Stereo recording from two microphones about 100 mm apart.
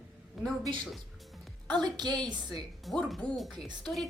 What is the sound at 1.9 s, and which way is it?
Speech, 45° right (ahead or behind).